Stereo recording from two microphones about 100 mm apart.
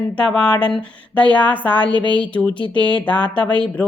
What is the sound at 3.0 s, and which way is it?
Speech, 15° left (ahead or behind).